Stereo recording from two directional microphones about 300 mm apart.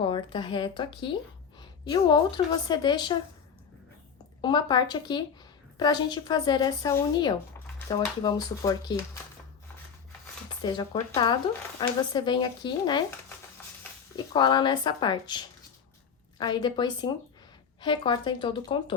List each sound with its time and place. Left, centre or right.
0.0 s speech: centre
4.4 s speech: centre
10.6 s speech: centre
14.3 s speech: centre